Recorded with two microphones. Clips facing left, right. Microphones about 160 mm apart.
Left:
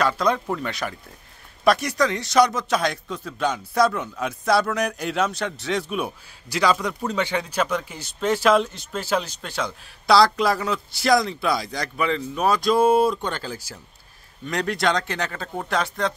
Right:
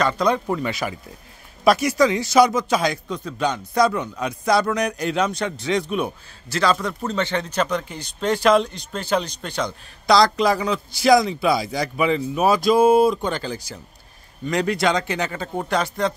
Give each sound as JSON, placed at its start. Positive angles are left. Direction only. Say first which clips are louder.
{"t": 0.0, "sound": "speech", "louder": "right 2 dB", "side_deg": 0}